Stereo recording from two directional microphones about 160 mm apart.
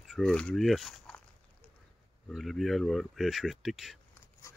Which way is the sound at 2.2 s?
Centre (ahead or behind).